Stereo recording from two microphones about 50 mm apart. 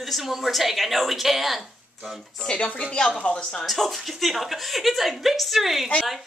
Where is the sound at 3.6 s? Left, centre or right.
Centre.